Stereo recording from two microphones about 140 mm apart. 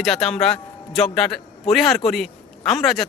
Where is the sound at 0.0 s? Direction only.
Centre (ahead or behind).